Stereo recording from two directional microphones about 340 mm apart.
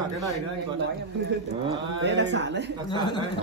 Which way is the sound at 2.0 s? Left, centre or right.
Right.